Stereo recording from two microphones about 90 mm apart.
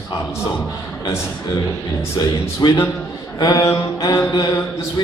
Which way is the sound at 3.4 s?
40° left (ahead or behind).